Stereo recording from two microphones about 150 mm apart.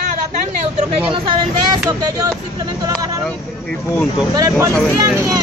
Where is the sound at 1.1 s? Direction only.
35° right (ahead or behind).